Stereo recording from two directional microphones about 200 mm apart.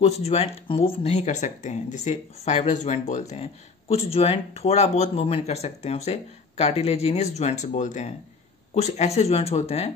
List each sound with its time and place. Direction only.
0.0 s speech: 30° left (ahead or behind)